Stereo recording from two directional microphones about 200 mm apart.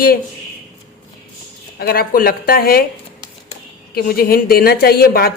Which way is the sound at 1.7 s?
50° left (ahead or behind).